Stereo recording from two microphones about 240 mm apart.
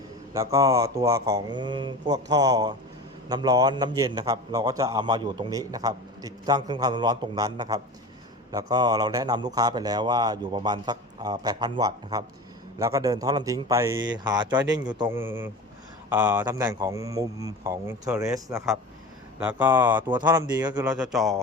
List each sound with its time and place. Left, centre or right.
0.3 s a man's voice: centre
20.9 s speech: centre